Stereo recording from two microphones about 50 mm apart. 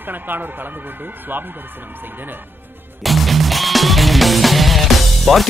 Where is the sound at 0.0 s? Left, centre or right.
Right.